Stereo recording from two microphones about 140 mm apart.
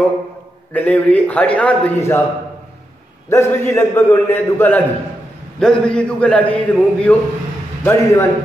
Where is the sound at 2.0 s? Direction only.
20° left (ahead or behind).